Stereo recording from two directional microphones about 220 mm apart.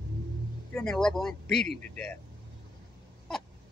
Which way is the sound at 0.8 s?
5° left (ahead or behind).